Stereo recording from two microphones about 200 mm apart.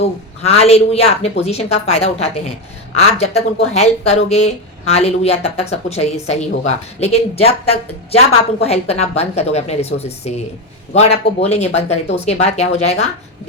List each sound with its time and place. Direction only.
0.0 s speech: 30° left (ahead or behind)